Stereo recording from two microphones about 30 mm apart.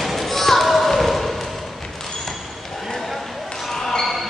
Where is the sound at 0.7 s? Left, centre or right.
Centre.